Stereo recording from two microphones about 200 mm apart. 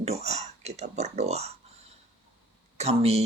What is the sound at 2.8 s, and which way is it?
Speech, 30° right (ahead or behind).